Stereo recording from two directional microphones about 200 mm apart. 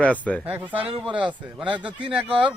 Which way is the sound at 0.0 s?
5° left (ahead or behind).